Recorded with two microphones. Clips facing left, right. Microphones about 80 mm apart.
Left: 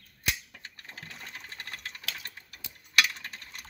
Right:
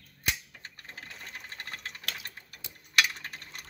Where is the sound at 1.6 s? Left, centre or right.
Right.